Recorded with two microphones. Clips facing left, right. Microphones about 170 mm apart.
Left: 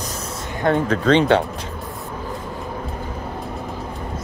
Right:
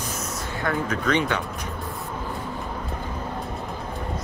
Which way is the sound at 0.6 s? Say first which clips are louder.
Left 8 dB; 25° left (ahead or behind).